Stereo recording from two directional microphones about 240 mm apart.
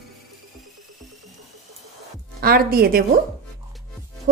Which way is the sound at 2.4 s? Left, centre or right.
Right.